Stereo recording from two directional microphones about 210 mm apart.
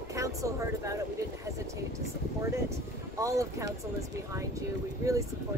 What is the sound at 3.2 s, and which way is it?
Speech, 15° right (ahead or behind).